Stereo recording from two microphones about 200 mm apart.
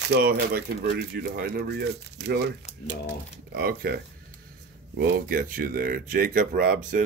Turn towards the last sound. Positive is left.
turn(degrees=-40)  # may be behind; listen again after turning